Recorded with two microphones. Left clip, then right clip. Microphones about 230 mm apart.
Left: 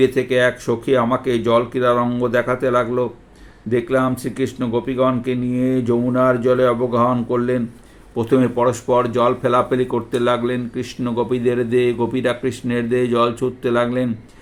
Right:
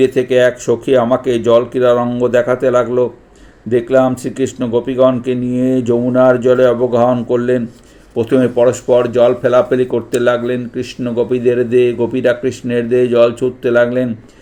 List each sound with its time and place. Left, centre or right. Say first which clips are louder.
0.0 s speech: right 5 dB; centre